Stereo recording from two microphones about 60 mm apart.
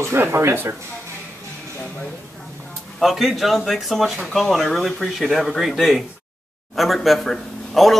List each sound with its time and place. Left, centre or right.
0.0 s speech: right
3.0 s a man's voice: centre